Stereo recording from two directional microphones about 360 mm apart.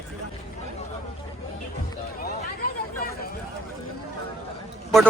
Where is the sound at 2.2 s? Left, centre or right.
Left.